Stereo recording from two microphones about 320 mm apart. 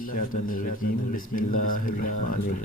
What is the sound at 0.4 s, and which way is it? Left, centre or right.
A man's voice, left.